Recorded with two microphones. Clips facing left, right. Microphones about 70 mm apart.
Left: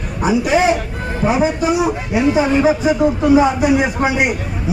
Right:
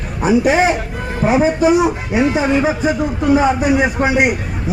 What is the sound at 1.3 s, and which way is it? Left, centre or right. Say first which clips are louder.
Speech: right 3 dB; right.